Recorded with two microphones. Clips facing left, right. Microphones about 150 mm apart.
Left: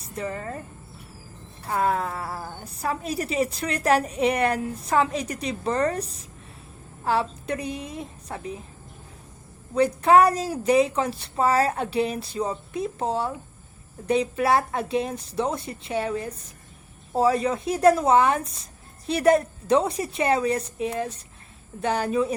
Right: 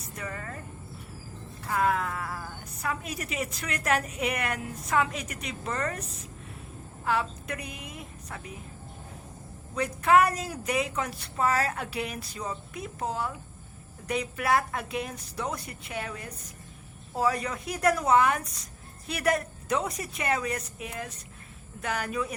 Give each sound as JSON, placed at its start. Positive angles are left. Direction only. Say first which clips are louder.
{"t": 0.0, "sound": "speech", "louder": "left 7 dB", "side_deg": 30}
{"t": 1.6, "sound": "a woman's voice", "louder": "left 3 dB", "side_deg": 30}
{"t": 9.7, "sound": "speech", "louder": "left 5 dB", "side_deg": 30}